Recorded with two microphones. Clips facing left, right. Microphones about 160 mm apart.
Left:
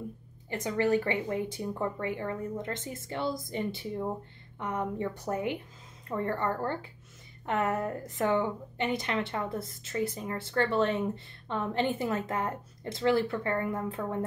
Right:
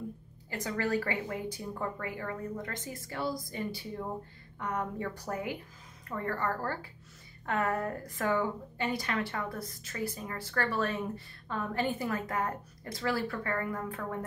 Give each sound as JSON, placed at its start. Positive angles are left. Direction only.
{"t": 0.5, "sound": "a woman's voice", "side_deg": 20}